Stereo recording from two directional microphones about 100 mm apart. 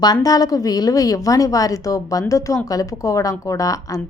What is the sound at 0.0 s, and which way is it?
A woman's voice, 40° left (ahead or behind).